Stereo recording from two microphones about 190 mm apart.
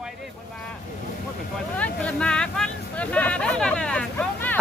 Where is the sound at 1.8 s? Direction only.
5° left (ahead or behind).